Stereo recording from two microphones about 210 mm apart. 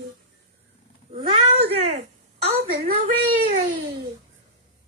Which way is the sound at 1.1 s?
25° right (ahead or behind).